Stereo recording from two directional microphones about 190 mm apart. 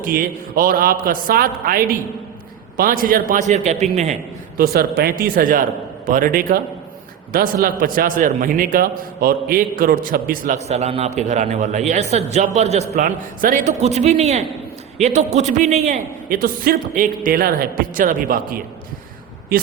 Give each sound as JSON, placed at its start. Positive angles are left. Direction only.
{"t": 0.0, "sound": "a man's voice", "side_deg": -45}
{"t": 4.5, "sound": "a man's voice", "side_deg": -55}